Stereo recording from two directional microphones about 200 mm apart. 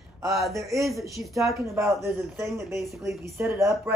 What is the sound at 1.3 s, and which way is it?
Speech, 15° right (ahead or behind).